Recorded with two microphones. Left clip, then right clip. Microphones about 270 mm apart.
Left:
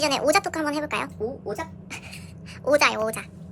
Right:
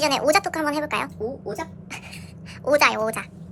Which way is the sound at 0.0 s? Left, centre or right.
Centre.